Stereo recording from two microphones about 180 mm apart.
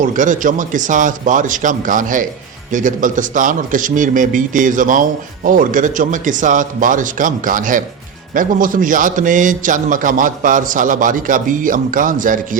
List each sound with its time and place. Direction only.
0.0 s speech: 45° right (ahead or behind)